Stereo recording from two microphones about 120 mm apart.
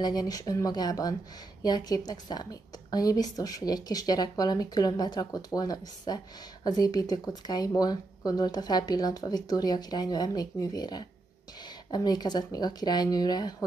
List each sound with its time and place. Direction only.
0.0 s speech: 35° left (ahead or behind)